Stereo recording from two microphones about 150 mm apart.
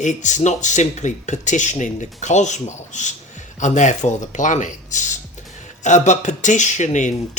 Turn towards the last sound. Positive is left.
turn(degrees=55)  # may be behind; listen again after turning